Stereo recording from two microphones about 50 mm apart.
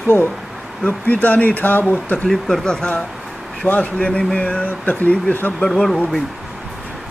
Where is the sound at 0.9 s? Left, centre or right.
Left.